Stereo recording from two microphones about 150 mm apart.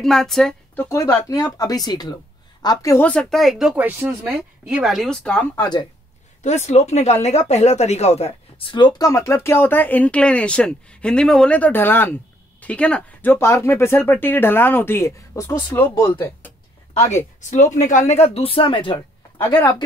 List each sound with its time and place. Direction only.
0.0 s a woman's voice: centre (ahead or behind)
0.8 s speech: 20° left (ahead or behind)
3.1 s speech: 5° left (ahead or behind)
5.6 s speech: 30° left (ahead or behind)
6.4 s speech: 50° left (ahead or behind); by 16.5 s 15° left (ahead or behind)
17.1 s speech: 50° left (ahead or behind); by 19.0 s 35° left (ahead or behind)
19.3 s speech: 15° left (ahead or behind)